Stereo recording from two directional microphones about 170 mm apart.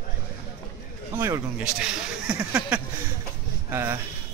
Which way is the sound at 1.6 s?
5° right (ahead or behind).